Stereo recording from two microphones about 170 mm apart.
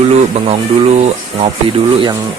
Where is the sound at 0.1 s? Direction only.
35° right (ahead or behind).